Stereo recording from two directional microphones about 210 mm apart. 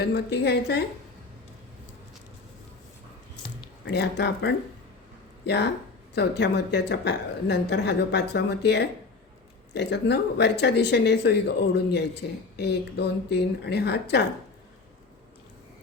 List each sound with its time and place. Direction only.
0.1 s speech: 55° left (ahead or behind)
3.8 s speech: 50° left (ahead or behind)